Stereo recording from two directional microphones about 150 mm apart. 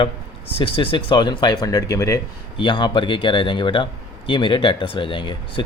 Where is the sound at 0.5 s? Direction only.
35° left (ahead or behind).